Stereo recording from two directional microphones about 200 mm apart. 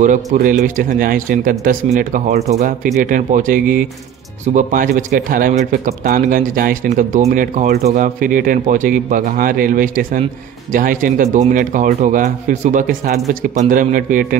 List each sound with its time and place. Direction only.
0.0 s speech: 40° right (ahead or behind)